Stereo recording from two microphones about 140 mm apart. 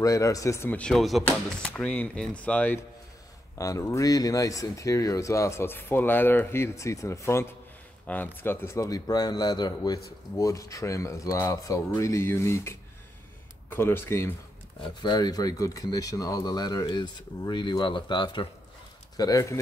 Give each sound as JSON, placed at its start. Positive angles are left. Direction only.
{"t": 0.0, "sound": "speech", "side_deg": 25}
{"t": 0.7, "sound": "speech", "side_deg": 5}
{"t": 3.5, "sound": "speech", "side_deg": 25}
{"t": 15.0, "sound": "speech", "side_deg": 30}